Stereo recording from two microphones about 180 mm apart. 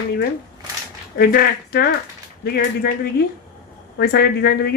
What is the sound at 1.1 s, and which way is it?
Speech, 55° left (ahead or behind).